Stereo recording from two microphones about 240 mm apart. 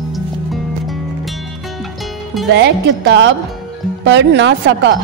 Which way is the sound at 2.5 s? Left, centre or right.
Right.